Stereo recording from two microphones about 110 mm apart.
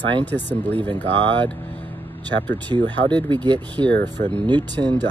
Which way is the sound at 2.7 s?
35° left (ahead or behind).